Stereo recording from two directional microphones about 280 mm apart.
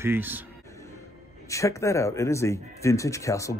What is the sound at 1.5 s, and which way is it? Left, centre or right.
Speech, centre.